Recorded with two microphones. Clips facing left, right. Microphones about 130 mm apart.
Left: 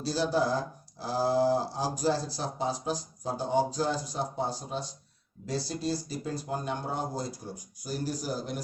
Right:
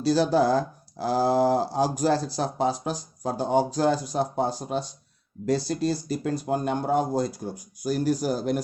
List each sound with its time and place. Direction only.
0.0 s speech: 70° right (ahead or behind)